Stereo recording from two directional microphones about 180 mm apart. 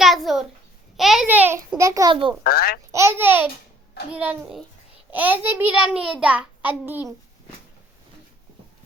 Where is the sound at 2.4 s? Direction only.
55° left (ahead or behind).